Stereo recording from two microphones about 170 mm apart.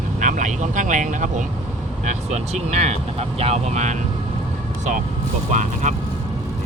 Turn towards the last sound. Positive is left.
turn(degrees=-45)  # may be behind; listen again after turning